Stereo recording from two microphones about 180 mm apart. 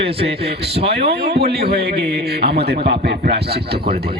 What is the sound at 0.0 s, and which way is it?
Speech, 30° right (ahead or behind).